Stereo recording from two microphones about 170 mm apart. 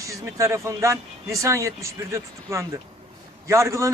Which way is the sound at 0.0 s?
20° right (ahead or behind).